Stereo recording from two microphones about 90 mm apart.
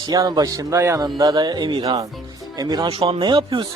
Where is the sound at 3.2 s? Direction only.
65° right (ahead or behind).